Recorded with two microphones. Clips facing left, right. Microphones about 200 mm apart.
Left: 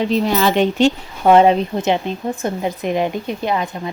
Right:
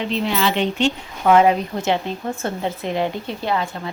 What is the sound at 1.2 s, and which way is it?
A woman's voice, 30° left (ahead or behind).